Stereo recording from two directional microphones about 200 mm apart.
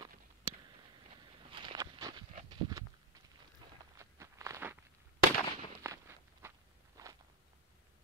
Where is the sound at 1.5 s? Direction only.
25° right (ahead or behind).